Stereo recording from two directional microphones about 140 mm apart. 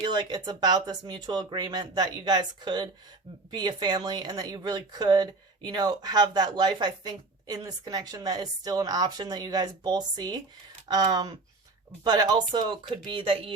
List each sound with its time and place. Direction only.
0.0 s speech: 30° right (ahead or behind)